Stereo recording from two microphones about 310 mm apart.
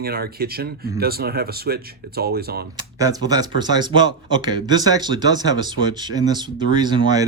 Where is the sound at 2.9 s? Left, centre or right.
Centre.